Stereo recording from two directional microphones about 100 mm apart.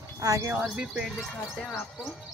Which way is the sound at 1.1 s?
Centre (ahead or behind).